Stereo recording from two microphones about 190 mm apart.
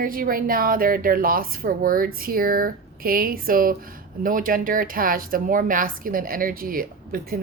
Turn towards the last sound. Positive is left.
turn(degrees=-50)  # may be behind; listen again after turning